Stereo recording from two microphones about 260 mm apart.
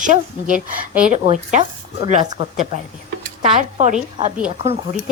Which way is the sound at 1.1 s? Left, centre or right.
Right.